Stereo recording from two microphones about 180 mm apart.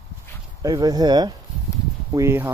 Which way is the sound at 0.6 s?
20° right (ahead or behind).